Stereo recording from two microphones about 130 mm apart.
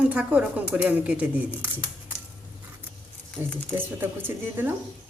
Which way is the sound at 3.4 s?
15° right (ahead or behind).